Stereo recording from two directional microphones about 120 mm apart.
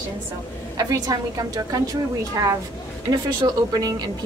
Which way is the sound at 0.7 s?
30° right (ahead or behind).